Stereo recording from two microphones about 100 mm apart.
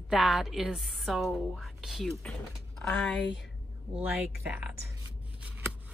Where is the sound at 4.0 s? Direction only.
15° right (ahead or behind).